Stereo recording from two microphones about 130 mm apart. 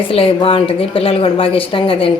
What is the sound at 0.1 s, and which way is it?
Speech, 45° left (ahead or behind).